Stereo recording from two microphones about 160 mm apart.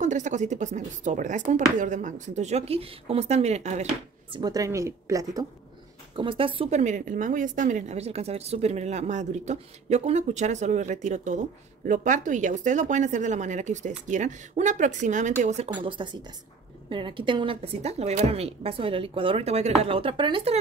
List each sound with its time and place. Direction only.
0.0 s speech: 50° right (ahead or behind)
4.3 s a woman's voice: 25° right (ahead or behind)
6.1 s a woman's voice: 35° right (ahead or behind)
6.8 s speech: 55° right (ahead or behind)
15.7 s a woman's voice: 30° right (ahead or behind)